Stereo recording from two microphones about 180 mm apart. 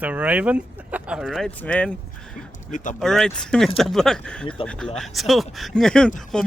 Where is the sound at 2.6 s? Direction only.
45° left (ahead or behind).